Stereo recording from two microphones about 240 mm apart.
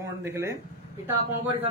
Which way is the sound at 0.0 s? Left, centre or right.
Centre.